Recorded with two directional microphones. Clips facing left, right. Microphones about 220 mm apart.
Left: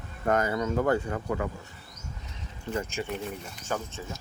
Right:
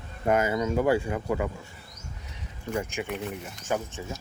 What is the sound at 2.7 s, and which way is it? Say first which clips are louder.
Speech: right 1 dB; 15° right (ahead or behind).